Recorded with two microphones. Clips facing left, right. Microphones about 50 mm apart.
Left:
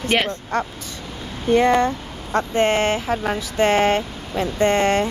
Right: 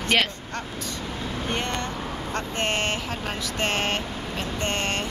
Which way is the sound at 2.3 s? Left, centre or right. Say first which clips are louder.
Left 10 dB; left.